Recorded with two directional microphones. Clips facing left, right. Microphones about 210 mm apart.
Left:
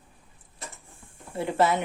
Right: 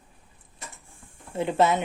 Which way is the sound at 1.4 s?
20° right (ahead or behind).